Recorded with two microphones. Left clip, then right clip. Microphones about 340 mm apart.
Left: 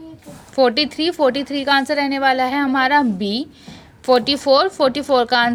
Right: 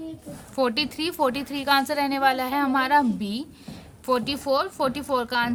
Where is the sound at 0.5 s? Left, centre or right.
Right.